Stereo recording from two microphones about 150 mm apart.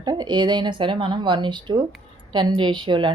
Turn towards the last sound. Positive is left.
turn(degrees=-30)  # may be behind; listen again after turning